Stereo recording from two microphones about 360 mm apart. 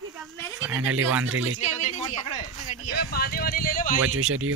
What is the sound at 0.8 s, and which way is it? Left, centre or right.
Speech, right.